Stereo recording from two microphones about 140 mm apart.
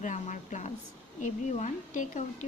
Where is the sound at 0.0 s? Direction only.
60° left (ahead or behind).